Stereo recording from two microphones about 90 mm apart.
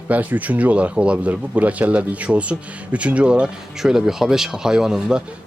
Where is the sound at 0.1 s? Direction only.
15° right (ahead or behind).